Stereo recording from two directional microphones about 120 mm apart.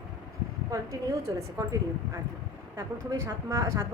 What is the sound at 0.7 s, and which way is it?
A woman's voice, 25° right (ahead or behind).